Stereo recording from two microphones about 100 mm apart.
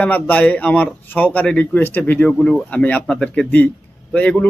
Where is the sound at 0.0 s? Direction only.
15° left (ahead or behind).